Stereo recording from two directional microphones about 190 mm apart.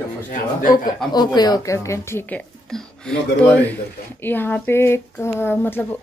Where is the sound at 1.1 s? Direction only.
20° left (ahead or behind).